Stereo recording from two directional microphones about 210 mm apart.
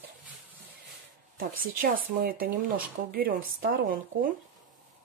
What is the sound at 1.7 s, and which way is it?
Speech, 40° right (ahead or behind).